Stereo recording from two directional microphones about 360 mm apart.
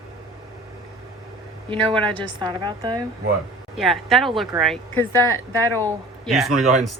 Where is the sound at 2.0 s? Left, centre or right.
Centre.